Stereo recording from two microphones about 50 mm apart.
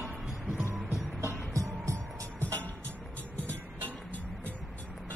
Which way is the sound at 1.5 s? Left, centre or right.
Right.